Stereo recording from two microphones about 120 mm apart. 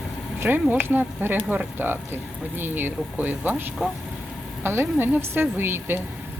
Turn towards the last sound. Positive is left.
turn(degrees=-20)  # may be behind; listen again after turning